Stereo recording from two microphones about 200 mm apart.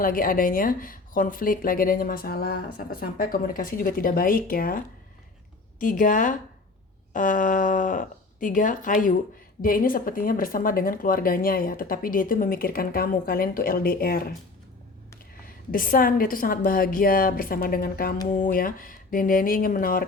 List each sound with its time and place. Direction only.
0.0 s speech: 45° left (ahead or behind)
5.8 s speech: 40° left (ahead or behind)
15.7 s speech: 45° left (ahead or behind)